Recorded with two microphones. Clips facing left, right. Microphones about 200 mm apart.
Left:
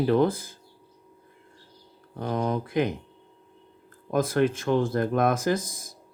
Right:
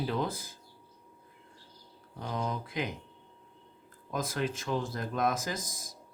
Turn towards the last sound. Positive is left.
turn(degrees=60)  # may be behind; listen again after turning